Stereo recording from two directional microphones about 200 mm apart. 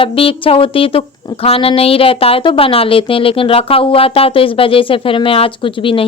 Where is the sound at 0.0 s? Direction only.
25° left (ahead or behind).